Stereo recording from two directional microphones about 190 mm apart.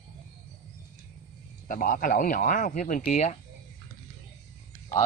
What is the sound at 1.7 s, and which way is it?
Speech, 50° left (ahead or behind).